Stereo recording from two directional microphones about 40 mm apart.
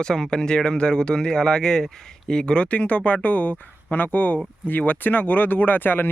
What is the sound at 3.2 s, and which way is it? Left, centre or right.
Speech, left.